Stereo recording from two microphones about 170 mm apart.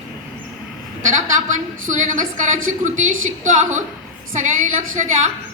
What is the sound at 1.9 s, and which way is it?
A woman's voice, 50° right (ahead or behind).